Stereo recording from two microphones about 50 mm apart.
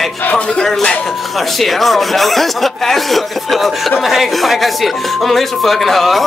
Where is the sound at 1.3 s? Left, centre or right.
Centre.